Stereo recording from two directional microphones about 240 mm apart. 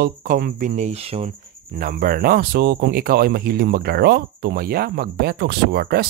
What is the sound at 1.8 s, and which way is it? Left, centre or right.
Speech, right.